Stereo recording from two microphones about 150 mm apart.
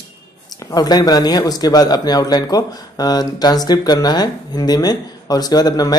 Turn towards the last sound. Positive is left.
turn(degrees=25)  # may be behind; listen again after turning